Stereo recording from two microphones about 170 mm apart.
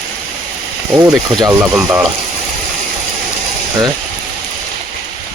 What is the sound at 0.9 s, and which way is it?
Speech, 20° right (ahead or behind).